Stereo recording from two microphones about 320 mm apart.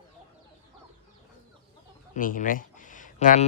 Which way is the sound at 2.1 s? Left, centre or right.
Left.